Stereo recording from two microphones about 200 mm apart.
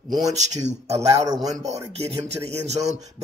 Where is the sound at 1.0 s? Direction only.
15° right (ahead or behind).